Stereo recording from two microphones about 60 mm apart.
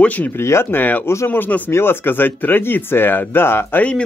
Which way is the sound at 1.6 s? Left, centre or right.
Left.